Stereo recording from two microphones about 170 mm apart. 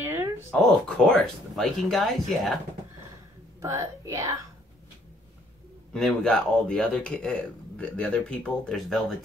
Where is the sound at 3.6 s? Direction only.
15° right (ahead or behind).